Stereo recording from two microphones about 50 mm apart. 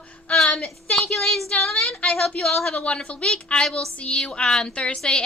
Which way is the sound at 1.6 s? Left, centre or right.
Centre.